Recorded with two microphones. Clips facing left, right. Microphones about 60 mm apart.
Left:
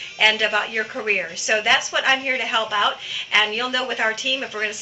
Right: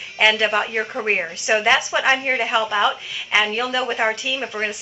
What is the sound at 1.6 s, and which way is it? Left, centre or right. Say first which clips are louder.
A woman's voice: right 1 dB; right.